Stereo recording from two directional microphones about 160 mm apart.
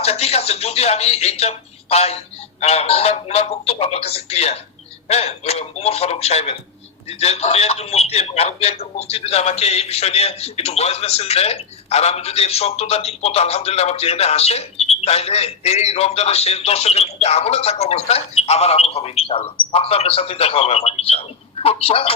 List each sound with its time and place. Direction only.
0.0 s a man's voice: 40° left (ahead or behind)